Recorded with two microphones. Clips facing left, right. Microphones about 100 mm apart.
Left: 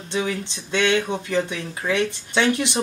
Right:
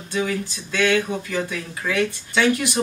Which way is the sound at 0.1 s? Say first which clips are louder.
Right 1 dB; 25° left (ahead or behind).